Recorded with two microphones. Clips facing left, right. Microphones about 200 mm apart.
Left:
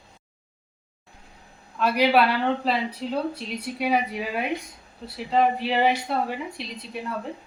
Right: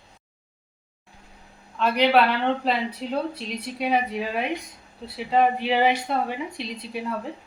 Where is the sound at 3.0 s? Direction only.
5° right (ahead or behind).